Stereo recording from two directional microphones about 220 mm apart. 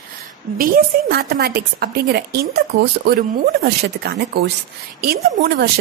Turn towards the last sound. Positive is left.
turn(degrees=-45)  # may be behind; listen again after turning